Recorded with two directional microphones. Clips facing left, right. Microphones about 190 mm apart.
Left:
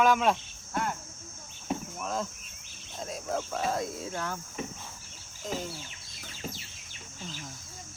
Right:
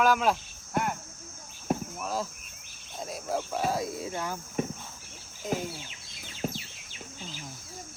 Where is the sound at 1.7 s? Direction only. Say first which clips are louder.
Right 4 dB; 55° right (ahead or behind).